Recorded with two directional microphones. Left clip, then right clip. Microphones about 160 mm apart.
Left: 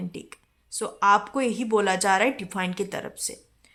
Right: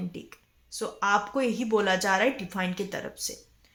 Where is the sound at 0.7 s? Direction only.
30° left (ahead or behind).